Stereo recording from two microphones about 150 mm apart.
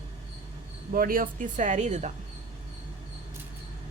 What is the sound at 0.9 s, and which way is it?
A woman's voice, 70° right (ahead or behind).